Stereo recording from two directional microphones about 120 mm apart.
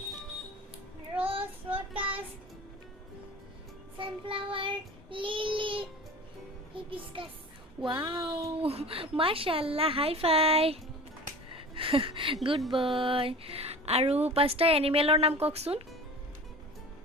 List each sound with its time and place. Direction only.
1.2 s child singing: 50° right (ahead or behind)
3.9 s child singing: 45° right (ahead or behind)
6.7 s music: 45° right (ahead or behind)
7.9 s a woman's voice: 45° right (ahead or behind)
8.6 s a woman's voice: 55° right (ahead or behind)